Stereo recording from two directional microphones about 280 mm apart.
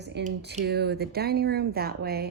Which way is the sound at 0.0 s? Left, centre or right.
Right.